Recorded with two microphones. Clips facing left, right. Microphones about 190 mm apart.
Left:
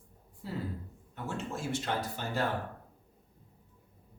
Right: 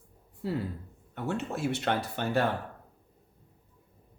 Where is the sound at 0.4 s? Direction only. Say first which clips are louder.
Right 5 dB; 65° right (ahead or behind).